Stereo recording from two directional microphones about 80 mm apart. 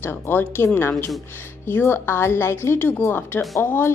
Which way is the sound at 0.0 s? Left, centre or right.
Left.